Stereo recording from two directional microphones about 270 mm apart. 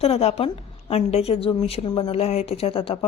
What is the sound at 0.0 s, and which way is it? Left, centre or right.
A woman's voice, left.